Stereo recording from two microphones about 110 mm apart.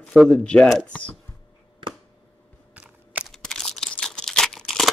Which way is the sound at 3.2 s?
5° left (ahead or behind).